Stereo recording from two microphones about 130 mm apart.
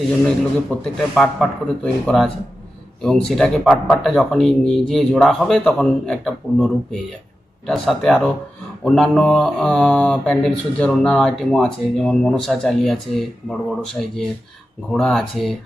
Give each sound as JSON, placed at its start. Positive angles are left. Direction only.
{"t": 0.3, "sound": "speech", "side_deg": 5}
{"t": 7.7, "sound": "speech", "side_deg": 0}
{"t": 14.9, "sound": "speech", "side_deg": 5}